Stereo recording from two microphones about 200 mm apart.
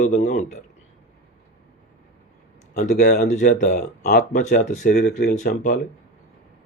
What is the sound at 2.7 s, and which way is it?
Speech, 50° left (ahead or behind).